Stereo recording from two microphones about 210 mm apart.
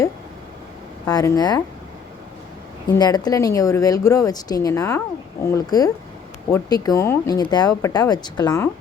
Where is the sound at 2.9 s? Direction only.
20° left (ahead or behind).